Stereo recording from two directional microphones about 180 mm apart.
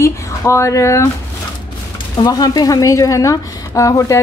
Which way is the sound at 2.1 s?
20° left (ahead or behind).